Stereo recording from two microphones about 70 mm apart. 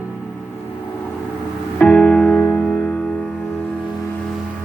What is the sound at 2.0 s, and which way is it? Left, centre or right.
Music, centre.